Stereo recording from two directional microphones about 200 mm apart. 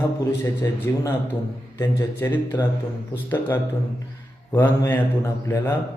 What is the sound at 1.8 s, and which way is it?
A man's voice, 15° left (ahead or behind).